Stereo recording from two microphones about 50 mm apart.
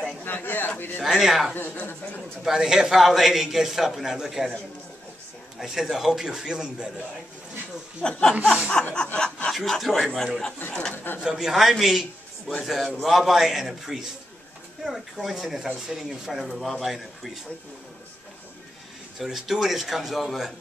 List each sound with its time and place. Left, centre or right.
0.2 s a sound: left
1.0 s speech: centre
1.5 s speech: left
2.4 s a man's voice: centre
5.6 s a man's voice: centre
8.0 s speech: centre
8.9 s snicker: centre
9.5 s speech: centre
11.1 s a man's voice: centre
19.1 s speech: centre